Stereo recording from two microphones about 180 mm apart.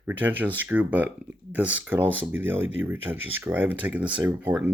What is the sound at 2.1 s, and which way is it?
Speech, 90° right.